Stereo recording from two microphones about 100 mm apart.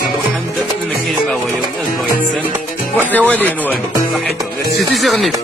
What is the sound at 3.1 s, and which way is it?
Speech, 15° left (ahead or behind).